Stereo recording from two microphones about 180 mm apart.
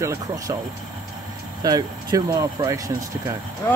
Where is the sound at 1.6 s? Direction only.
20° right (ahead or behind).